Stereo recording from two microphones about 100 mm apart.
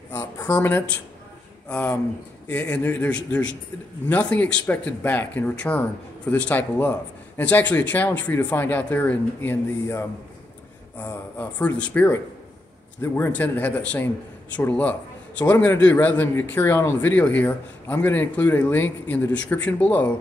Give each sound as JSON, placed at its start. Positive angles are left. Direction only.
{"t": 0.1, "sound": "speech", "side_deg": 20}
{"t": 13.0, "sound": "speech", "side_deg": 25}
{"t": 13.3, "sound": "speech", "side_deg": 15}